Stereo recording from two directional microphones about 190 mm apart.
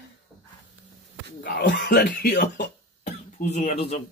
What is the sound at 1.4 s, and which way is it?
Speech, 60° left (ahead or behind).